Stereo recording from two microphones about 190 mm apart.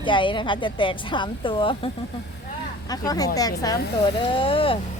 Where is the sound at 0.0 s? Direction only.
25° left (ahead or behind).